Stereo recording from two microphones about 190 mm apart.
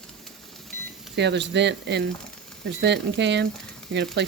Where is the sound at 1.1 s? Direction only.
65° right (ahead or behind).